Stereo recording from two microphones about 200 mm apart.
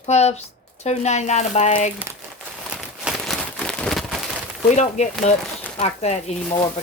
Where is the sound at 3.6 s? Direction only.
5° left (ahead or behind).